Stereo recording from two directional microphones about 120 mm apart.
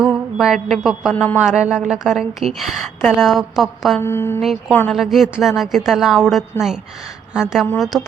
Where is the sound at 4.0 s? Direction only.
20° left (ahead or behind).